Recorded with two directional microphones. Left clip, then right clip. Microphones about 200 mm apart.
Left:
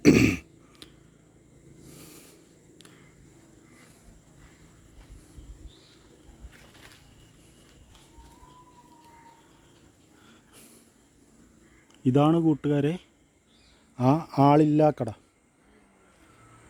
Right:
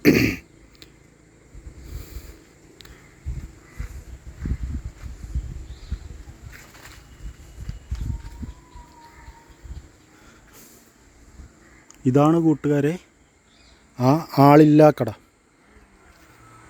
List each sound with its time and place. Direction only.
0.0 s throat clearing: 15° left (ahead or behind)
11.9 s speech: 5° right (ahead or behind)